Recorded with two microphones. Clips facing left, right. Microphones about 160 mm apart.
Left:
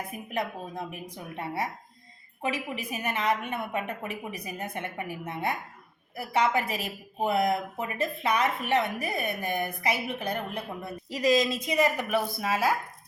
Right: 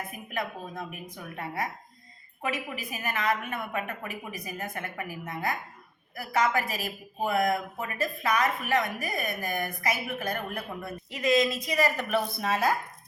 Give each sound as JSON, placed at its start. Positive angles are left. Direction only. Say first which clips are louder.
{"t": 0.3, "sound": "speech", "louder": "left 2 dB", "side_deg": 30}
{"t": 11.1, "sound": "speech", "louder": "left 1 dB", "side_deg": 35}